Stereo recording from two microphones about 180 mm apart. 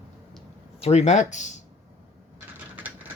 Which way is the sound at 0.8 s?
35° left (ahead or behind).